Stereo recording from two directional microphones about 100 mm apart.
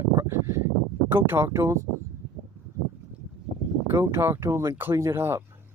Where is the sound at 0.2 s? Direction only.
30° right (ahead or behind).